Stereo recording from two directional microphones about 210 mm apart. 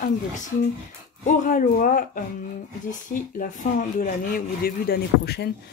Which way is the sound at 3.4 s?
35° left (ahead or behind).